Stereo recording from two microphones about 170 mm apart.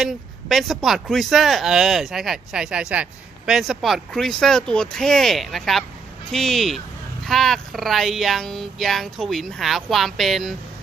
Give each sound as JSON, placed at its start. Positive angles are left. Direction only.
{"t": 0.0, "sound": "speech", "side_deg": 0}